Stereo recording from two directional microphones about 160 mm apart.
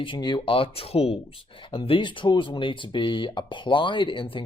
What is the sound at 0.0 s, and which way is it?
Speech, 30° left (ahead or behind).